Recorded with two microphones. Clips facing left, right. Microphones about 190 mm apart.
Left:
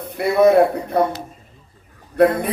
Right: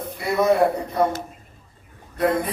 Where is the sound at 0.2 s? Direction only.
65° left (ahead or behind).